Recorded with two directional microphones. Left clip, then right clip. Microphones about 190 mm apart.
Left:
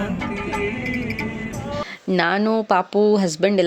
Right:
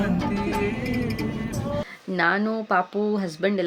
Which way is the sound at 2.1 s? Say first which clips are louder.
Left 3 dB; 45° left (ahead or behind).